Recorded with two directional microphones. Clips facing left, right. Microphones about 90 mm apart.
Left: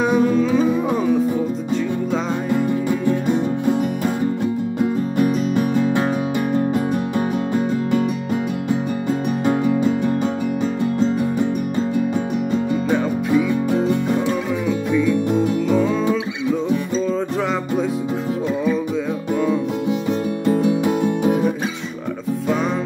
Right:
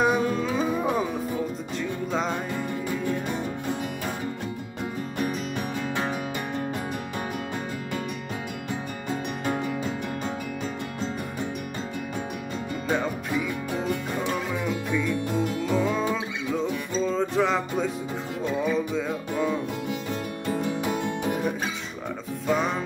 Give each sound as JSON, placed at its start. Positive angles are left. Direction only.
{"t": 0.0, "sound": "music", "side_deg": -5}
{"t": 7.2, "sound": "music", "side_deg": 30}
{"t": 15.7, "sound": "music", "side_deg": 0}
{"t": 20.1, "sound": "music", "side_deg": 20}